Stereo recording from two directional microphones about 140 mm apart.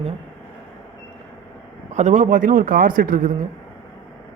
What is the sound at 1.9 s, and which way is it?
A man's voice, 55° right (ahead or behind).